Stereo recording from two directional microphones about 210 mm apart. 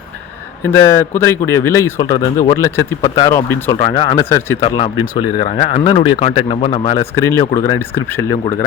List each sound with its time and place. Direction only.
0.6 s speech: 15° left (ahead or behind)
4.2 s speech: 10° left (ahead or behind)
4.6 s speech: 20° left (ahead or behind)
7.2 s speech: 15° left (ahead or behind)